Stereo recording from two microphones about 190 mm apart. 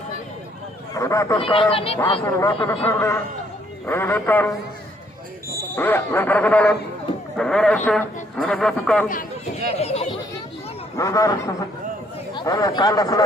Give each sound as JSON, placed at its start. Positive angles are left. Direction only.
{"t": 0.9, "sound": "speech", "side_deg": 15}
{"t": 1.4, "sound": "speech", "side_deg": 30}
{"t": 2.4, "sound": "speech", "side_deg": 15}
{"t": 5.7, "sound": "a woman's voice", "side_deg": 10}
{"t": 9.7, "sound": "chatter", "side_deg": 35}
{"t": 10.9, "sound": "speech", "side_deg": 15}